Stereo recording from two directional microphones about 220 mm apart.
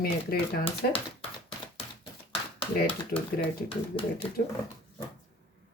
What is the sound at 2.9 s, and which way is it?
Speech, 25° left (ahead or behind).